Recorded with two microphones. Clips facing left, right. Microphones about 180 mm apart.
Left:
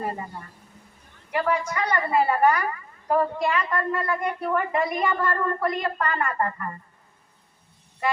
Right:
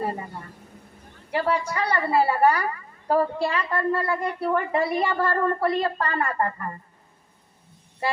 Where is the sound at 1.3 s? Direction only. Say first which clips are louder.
Even; 30° right (ahead or behind).